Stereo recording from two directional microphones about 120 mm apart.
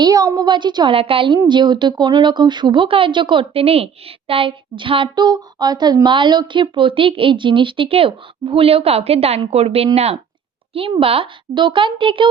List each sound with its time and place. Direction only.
0.0 s speech: 30° right (ahead or behind)
0.9 s a woman's voice: 50° right (ahead or behind)